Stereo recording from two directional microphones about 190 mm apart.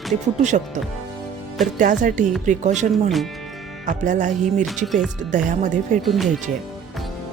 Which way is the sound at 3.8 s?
40° right (ahead or behind).